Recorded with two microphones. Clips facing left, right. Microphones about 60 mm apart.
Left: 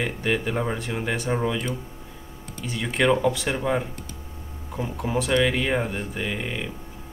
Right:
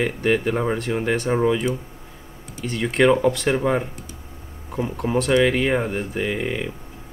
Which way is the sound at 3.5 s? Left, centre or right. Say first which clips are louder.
Right 4 dB; centre.